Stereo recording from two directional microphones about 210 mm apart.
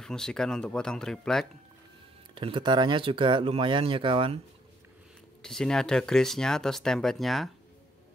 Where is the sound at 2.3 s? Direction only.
25° right (ahead or behind).